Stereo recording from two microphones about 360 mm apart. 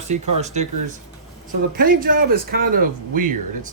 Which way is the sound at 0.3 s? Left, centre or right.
Centre.